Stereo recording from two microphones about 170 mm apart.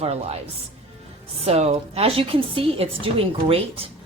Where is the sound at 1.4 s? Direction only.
40° right (ahead or behind).